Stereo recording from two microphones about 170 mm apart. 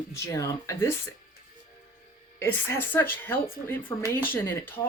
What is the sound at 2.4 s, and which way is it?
Speech, 10° left (ahead or behind).